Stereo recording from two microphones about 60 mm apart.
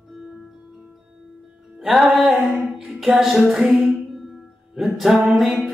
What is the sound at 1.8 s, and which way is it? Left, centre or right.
Music, centre.